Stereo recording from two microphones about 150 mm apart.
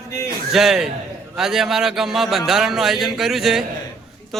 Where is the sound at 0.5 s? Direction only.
Centre (ahead or behind).